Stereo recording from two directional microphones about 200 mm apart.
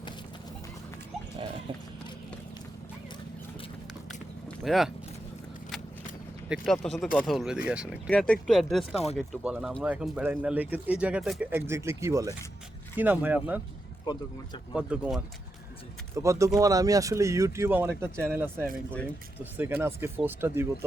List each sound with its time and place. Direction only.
4.1 s a sound: centre (ahead or behind)
6.5 s speech: centre (ahead or behind)
14.0 s speech: 20° left (ahead or behind)
14.7 s speech: 5° right (ahead or behind)
16.1 s speech: 15° right (ahead or behind)